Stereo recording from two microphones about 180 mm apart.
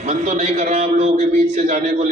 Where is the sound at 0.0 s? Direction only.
40° right (ahead or behind).